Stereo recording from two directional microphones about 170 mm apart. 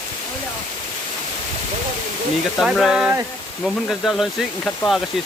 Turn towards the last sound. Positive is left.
turn(degrees=0)  # may be behind; listen again after turning